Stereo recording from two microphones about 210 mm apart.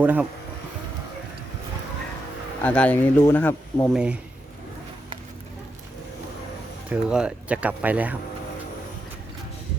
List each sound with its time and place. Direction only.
0.0 s speech: 10° right (ahead or behind)
2.6 s speech: 5° left (ahead or behind)
3.9 s speech: 5° right (ahead or behind)
6.9 s speech: 5° right (ahead or behind)